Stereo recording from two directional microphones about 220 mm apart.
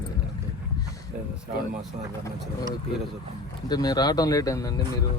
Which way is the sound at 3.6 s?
20° left (ahead or behind).